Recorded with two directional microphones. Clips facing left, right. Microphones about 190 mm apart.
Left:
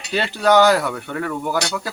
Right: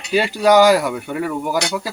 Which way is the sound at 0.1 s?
10° right (ahead or behind).